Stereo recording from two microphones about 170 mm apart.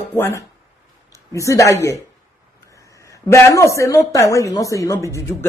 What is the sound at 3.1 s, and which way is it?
Speech, 15° left (ahead or behind).